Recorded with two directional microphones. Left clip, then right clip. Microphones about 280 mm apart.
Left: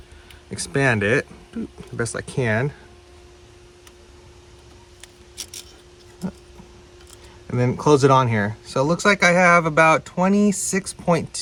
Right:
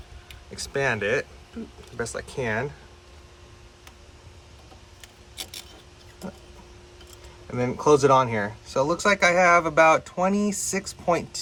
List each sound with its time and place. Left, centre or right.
0.5 s speech: left
7.5 s speech: left